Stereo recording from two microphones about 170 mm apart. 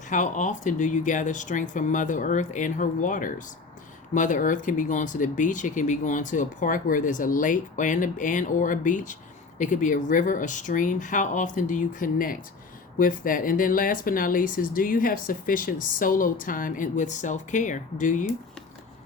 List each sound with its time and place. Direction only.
0.1 s speech: 45° left (ahead or behind)